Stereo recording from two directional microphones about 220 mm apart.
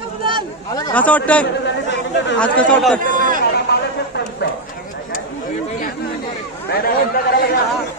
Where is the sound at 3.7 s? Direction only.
45° left (ahead or behind).